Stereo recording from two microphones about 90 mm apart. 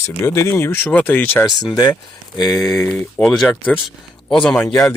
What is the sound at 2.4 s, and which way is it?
Speech, 45° left (ahead or behind).